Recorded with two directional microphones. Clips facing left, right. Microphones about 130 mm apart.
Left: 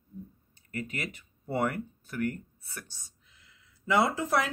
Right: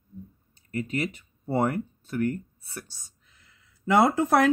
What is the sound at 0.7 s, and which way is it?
Speech, 30° right (ahead or behind).